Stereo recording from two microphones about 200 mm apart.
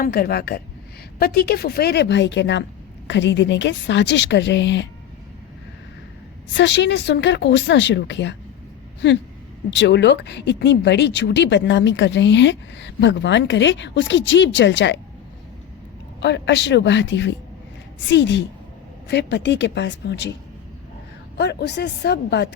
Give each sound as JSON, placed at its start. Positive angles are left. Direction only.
{"t": 0.0, "sound": "a woman's voice", "side_deg": 50}
{"t": 6.5, "sound": "speech", "side_deg": 60}
{"t": 9.6, "sound": "speech", "side_deg": 65}
{"t": 16.2, "sound": "speech", "side_deg": 60}
{"t": 21.3, "sound": "speech", "side_deg": 55}